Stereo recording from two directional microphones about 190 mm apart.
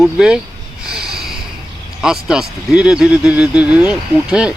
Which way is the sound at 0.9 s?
Centre (ahead or behind).